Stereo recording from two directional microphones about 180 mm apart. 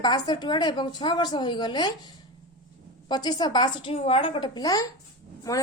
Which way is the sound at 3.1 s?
20° left (ahead or behind).